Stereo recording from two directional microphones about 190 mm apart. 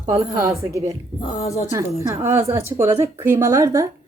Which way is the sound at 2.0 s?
15° right (ahead or behind).